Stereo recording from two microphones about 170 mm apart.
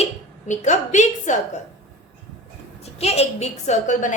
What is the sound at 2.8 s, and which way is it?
A woman's voice, 40° left (ahead or behind).